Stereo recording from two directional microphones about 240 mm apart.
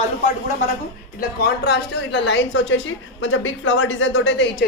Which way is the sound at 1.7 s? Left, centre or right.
Left.